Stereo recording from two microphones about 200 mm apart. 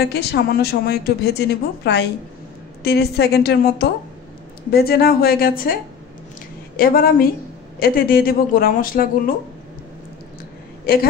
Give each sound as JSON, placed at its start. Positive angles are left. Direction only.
{"t": 0.0, "sound": "a woman's voice", "side_deg": 55}
{"t": 6.8, "sound": "a woman's voice", "side_deg": 45}
{"t": 10.9, "sound": "a woman's voice", "side_deg": 45}